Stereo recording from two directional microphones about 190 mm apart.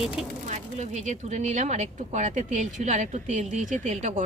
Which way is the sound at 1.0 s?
40° right (ahead or behind).